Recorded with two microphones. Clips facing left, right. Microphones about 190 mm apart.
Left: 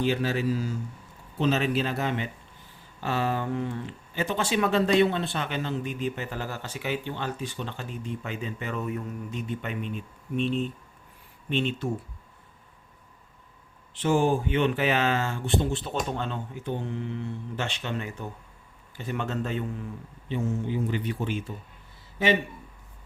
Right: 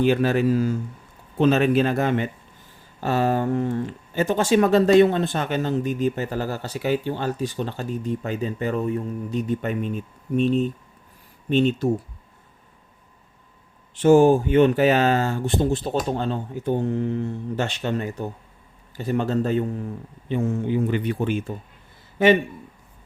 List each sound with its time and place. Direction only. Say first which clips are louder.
0.0 s speech: right 7 dB; 55° right (ahead or behind)
13.9 s speech: right 9 dB; 45° right (ahead or behind)
20.2 s speech: right 5 dB; 55° right (ahead or behind)